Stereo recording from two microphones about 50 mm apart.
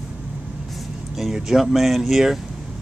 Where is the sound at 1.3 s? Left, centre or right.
Centre.